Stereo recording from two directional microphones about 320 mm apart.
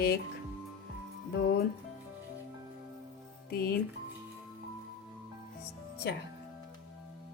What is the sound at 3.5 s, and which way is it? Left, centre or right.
Speech, left.